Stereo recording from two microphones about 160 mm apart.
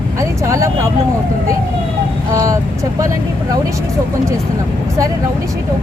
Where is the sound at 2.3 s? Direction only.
20° right (ahead or behind).